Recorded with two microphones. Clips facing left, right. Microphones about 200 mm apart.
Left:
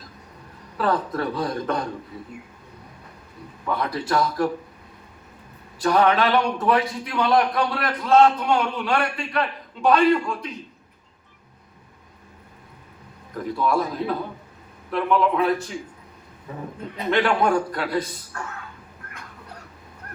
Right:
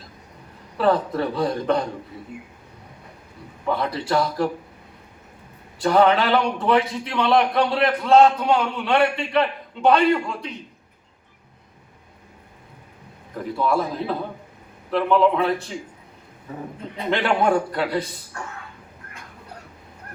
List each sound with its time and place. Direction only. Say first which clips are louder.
0.8 s a man's voice: right 3 dB; 30° right (ahead or behind)
3.7 s a man's voice: right 2 dB; 25° right (ahead or behind)
5.8 s a man's voice: right 2 dB; 25° right (ahead or behind)
13.7 s a man's voice: even; 25° right (ahead or behind)
17.1 s a man's voice: even; 25° right (ahead or behind)